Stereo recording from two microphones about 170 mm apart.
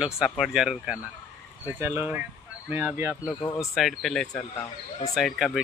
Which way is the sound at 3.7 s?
Centre (ahead or behind).